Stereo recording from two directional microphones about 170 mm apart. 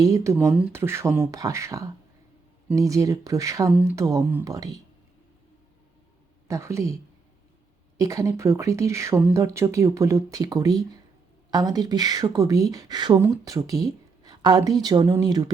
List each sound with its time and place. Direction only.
0.0 s speech: 20° right (ahead or behind)
6.5 s speech: 15° right (ahead or behind)
7.9 s speech: 20° right (ahead or behind)